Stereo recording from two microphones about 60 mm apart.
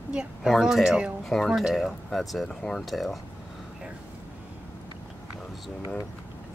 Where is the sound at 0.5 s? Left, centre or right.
Centre.